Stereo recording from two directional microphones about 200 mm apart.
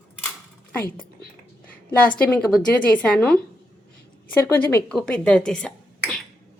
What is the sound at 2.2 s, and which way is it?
A woman's voice, 5° left (ahead or behind).